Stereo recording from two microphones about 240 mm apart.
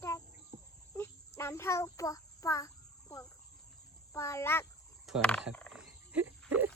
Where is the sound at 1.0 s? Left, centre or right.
Centre.